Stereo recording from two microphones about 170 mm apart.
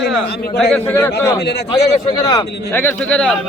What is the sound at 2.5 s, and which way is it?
Speech, 75° left (ahead or behind).